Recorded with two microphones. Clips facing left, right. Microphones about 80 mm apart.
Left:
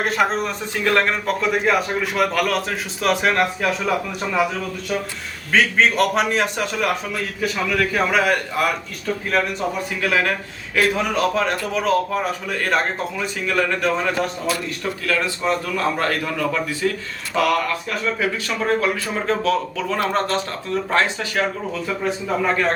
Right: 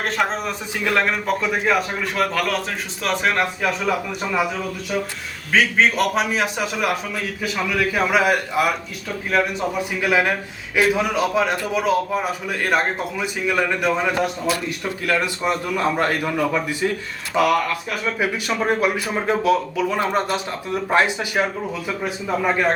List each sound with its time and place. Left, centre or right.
0.0 s a man's voice: centre
5.5 s a man's voice: centre